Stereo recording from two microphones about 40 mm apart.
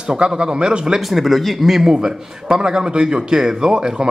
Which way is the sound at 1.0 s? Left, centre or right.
Centre.